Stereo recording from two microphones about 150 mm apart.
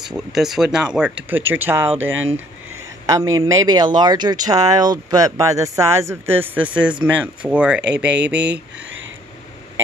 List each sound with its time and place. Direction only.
0.0 s speech: centre (ahead or behind)